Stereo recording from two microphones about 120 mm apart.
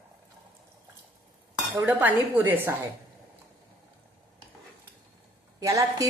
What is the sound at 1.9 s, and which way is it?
Speech, 15° right (ahead or behind).